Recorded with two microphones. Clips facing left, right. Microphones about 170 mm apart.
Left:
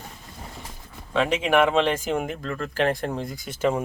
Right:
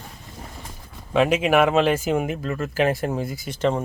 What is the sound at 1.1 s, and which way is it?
Speech, 10° right (ahead or behind).